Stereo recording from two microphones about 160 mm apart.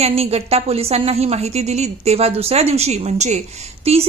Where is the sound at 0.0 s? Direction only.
40° right (ahead or behind).